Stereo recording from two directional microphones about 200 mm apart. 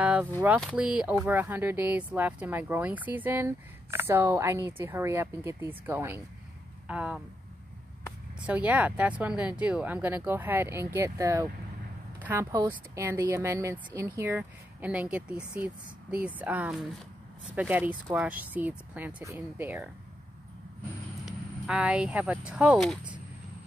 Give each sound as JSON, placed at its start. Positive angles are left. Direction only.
{"t": 0.0, "sound": "vehicle", "side_deg": -5}
{"t": 0.6, "sound": "speech", "side_deg": -5}
{"t": 8.5, "sound": "speech", "side_deg": -5}
{"t": 21.3, "sound": "speech", "side_deg": -5}